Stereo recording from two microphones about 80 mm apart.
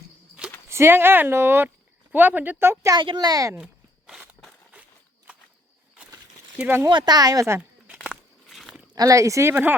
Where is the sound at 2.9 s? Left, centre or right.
Right.